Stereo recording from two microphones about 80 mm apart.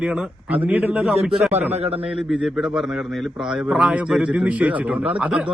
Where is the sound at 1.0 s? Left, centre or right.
Centre.